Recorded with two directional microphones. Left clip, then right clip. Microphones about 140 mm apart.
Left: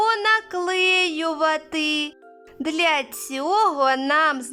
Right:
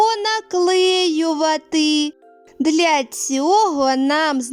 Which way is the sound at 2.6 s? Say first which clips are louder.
Right 5 dB; 40° right (ahead or behind).